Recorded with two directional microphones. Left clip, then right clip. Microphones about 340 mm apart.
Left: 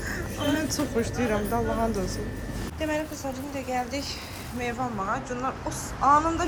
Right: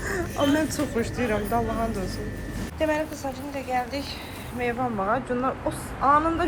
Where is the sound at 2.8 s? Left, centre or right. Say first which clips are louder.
Right 4 dB; centre.